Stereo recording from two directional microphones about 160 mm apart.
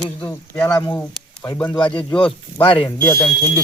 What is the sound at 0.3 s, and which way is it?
Speech, 15° left (ahead or behind).